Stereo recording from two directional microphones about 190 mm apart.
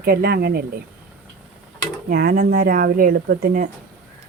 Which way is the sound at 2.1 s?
50° right (ahead or behind).